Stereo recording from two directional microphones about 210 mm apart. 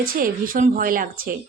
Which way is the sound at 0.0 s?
45° right (ahead or behind).